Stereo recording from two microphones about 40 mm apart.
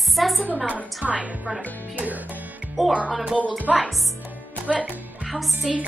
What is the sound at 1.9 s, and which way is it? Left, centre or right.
Music, right.